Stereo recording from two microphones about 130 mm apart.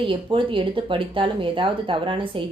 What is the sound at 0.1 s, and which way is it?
A woman's voice, 40° right (ahead or behind).